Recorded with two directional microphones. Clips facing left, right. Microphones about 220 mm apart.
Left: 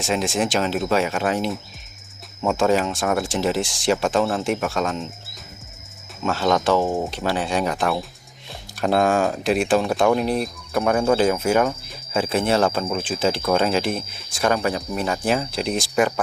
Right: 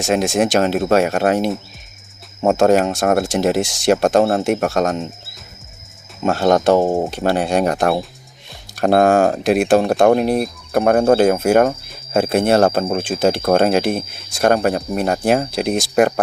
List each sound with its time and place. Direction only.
0.0 s speech: 50° right (ahead or behind)
6.2 s speech: 50° right (ahead or behind)